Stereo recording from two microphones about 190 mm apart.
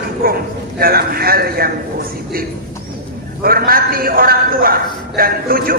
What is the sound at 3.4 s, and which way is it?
A man's voice, 50° right (ahead or behind).